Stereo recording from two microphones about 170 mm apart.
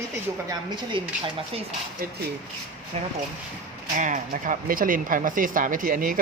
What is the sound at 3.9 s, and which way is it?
Speech, 50° right (ahead or behind).